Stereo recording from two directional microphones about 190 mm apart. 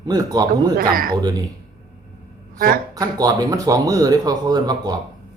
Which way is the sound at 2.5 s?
50° right (ahead or behind).